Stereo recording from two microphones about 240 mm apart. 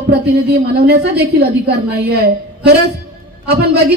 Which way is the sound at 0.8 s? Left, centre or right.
Right.